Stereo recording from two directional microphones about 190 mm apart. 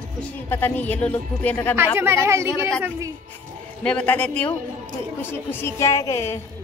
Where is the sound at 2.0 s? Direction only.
15° right (ahead or behind).